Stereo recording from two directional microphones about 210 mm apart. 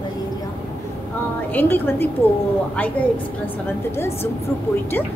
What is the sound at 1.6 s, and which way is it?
Speech, 10° left (ahead or behind).